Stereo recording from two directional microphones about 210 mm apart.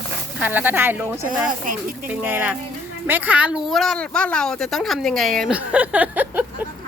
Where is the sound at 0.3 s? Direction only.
10° right (ahead or behind).